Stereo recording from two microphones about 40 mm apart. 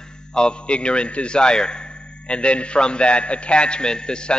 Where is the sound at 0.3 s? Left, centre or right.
Left.